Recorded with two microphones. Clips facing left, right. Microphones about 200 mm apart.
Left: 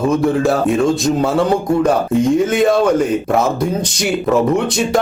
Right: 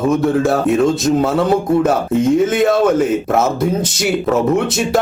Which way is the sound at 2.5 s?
Centre (ahead or behind).